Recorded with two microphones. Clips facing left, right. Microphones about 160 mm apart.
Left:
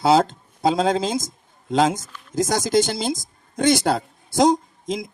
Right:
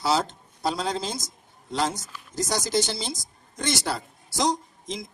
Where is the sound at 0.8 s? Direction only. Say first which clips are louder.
Left 9 dB; 50° left (ahead or behind).